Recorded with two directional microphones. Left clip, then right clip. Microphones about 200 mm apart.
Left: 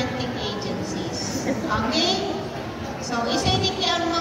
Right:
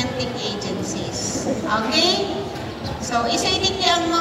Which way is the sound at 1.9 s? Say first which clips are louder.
Right 4 dB; 45° right (ahead or behind).